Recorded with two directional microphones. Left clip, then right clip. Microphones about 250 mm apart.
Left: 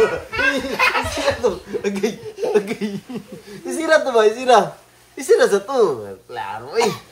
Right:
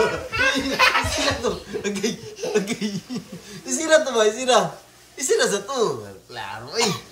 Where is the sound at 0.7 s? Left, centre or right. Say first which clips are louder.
Right 1 dB; centre.